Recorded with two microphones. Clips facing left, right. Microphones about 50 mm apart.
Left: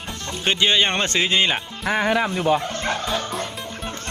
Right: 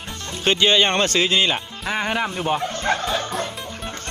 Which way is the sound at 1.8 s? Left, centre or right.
Left.